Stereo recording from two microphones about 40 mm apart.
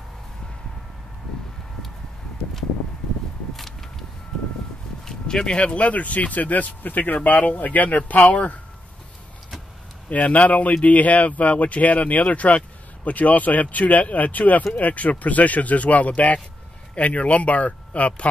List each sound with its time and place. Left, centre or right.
5.0 s a sound: centre
5.6 s speech: left
7.2 s speech: left
10.0 s speech: left